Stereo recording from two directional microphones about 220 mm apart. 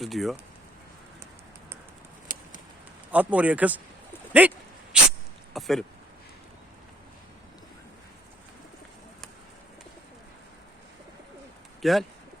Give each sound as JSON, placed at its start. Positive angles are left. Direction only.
{"t": 0.0, "sound": "speech", "side_deg": 0}
{"t": 2.3, "sound": "a sound", "side_deg": 35}
{"t": 3.1, "sound": "a man's voice", "side_deg": -5}
{"t": 4.3, "sound": "a sound", "side_deg": -5}
{"t": 5.5, "sound": "speech", "side_deg": 0}
{"t": 11.8, "sound": "speech", "side_deg": 0}